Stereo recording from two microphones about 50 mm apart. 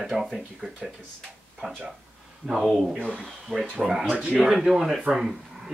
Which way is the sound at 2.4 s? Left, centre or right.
Centre.